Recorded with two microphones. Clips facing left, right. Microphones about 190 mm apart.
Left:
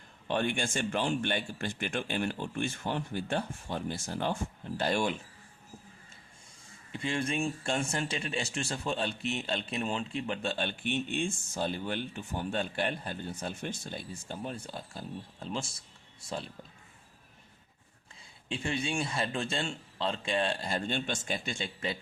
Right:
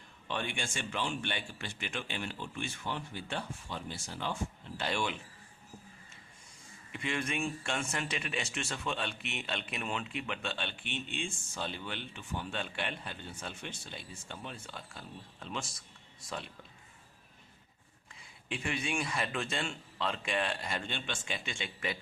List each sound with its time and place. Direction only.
0.3 s a man's voice: 45° left (ahead or behind)
6.9 s speech: 30° left (ahead or behind)
18.4 s speech: 30° left (ahead or behind)